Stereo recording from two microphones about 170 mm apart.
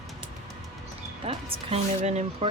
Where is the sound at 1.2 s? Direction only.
35° right (ahead or behind).